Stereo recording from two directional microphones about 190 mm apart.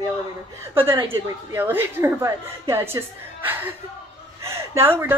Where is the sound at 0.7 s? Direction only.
15° right (ahead or behind).